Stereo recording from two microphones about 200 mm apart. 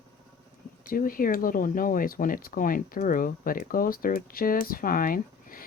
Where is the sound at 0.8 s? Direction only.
45° left (ahead or behind).